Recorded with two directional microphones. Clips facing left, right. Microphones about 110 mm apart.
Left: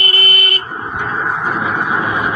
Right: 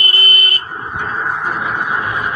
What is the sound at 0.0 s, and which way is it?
Vehicle, 20° left (ahead or behind).